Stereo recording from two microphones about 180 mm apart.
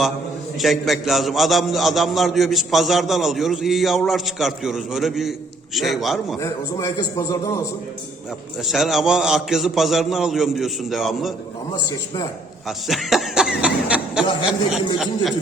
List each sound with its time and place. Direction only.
0.6 s a man's voice: centre (ahead or behind)
6.4 s a man's voice: 15° left (ahead or behind)
8.6 s a man's voice: centre (ahead or behind)
12.6 s a man's voice: centre (ahead or behind)